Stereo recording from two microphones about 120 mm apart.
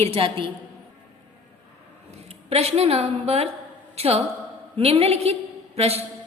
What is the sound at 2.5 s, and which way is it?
A woman's voice, 60° right (ahead or behind).